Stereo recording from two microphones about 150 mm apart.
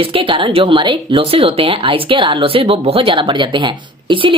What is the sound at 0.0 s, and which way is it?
Speech, 35° right (ahead or behind).